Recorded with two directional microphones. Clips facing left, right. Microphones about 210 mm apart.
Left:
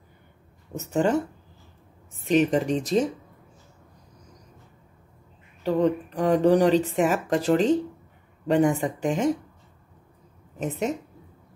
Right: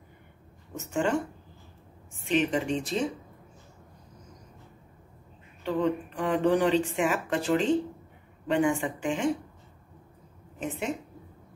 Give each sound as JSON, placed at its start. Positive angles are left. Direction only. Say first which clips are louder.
{"t": 0.9, "sound": "a woman's voice", "louder": "left 4 dB", "side_deg": 40}
{"t": 5.6, "sound": "a woman's voice", "louder": "left 5 dB", "side_deg": 40}
{"t": 10.6, "sound": "a woman's voice", "louder": "left 5 dB", "side_deg": 40}